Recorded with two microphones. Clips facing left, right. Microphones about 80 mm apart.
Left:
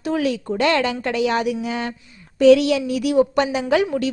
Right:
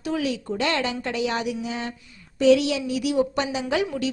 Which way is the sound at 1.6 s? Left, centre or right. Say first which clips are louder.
Left 5 dB; left.